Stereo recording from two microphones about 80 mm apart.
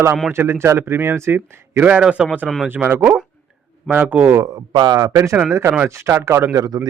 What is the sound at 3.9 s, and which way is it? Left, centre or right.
Speech, right.